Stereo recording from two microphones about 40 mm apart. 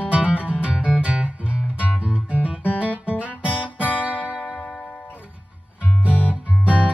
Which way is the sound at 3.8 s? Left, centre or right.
Left.